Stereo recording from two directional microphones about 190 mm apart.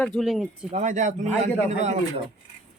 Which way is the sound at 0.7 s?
40° right (ahead or behind).